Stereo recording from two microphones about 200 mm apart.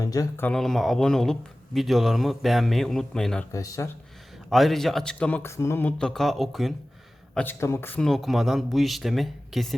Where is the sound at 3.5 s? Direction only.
15° left (ahead or behind).